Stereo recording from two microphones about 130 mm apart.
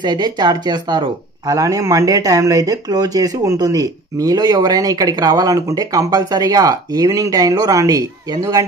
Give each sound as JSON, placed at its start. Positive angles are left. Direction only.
{"t": 0.0, "sound": "speech", "side_deg": -35}